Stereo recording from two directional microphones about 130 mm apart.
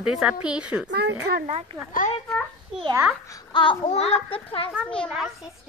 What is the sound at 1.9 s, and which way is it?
Speech, 85° left.